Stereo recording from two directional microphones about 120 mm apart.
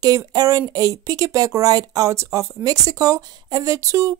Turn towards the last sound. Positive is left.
turn(degrees=-25)  # may be behind; listen again after turning